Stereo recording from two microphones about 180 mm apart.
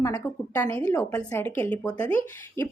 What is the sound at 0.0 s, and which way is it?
A woman's voice, 15° left (ahead or behind).